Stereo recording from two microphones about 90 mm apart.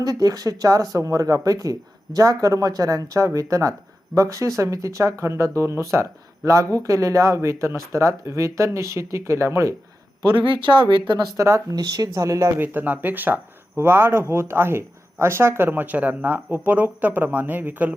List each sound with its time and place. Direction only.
0.0 s speech: 40° right (ahead or behind)
10.2 s speech: 65° right (ahead or behind)
11.3 s speech: 35° right (ahead or behind)
12.6 s speech: 20° right (ahead or behind)